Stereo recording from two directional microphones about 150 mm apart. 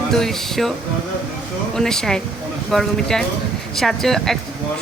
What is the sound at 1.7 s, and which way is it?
Speech, 5° left (ahead or behind).